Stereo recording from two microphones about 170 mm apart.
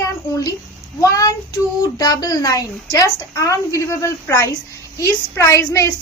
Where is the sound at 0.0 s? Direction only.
20° left (ahead or behind).